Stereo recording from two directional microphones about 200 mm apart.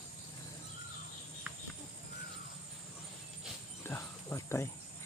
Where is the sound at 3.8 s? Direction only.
10° left (ahead or behind).